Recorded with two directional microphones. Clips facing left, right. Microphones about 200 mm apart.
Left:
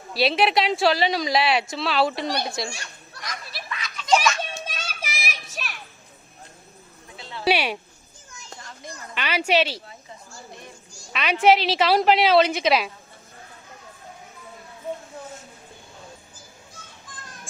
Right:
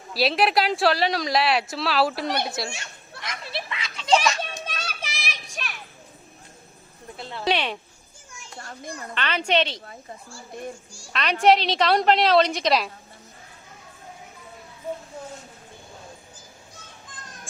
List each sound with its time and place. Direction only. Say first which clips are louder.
0.1 s speech: left 1 dB; centre (ahead or behind)
2.7 s children playing: right 1 dB; 25° right (ahead or behind)
4.6 s children playing: even; 10° left (ahead or behind)
7.4 s a woman's voice: left 3 dB; 10° left (ahead or behind)
8.5 s children playing: right 4 dB; 50° right (ahead or behind)
9.1 s speech: left 2 dB; 10° left (ahead or behind)
11.1 s speech: even; 5° left (ahead or behind)